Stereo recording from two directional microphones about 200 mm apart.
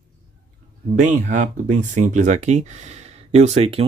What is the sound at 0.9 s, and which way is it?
Speech, 40° right (ahead or behind).